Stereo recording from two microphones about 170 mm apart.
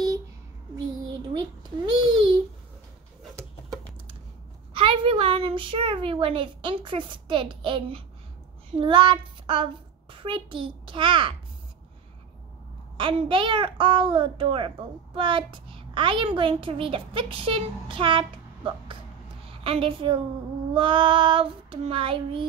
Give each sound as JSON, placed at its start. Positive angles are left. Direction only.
{"t": 1.6, "sound": "babbling", "side_deg": -25}
{"t": 4.7, "sound": "a woman's voice", "side_deg": -30}
{"t": 12.9, "sound": "a child's voice", "side_deg": -30}